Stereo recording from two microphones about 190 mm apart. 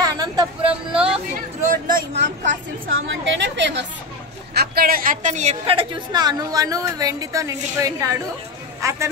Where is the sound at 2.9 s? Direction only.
70° right (ahead or behind).